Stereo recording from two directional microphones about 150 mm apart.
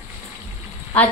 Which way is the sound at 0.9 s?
10° left (ahead or behind).